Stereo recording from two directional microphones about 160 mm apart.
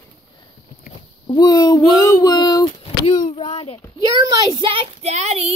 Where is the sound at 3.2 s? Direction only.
35° left (ahead or behind).